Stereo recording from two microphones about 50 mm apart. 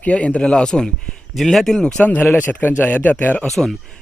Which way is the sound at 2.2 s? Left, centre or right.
Left.